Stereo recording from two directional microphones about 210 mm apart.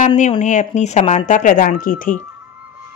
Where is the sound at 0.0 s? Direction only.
30° left (ahead or behind).